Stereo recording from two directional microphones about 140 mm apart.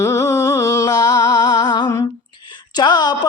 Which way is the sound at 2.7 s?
30° left (ahead or behind).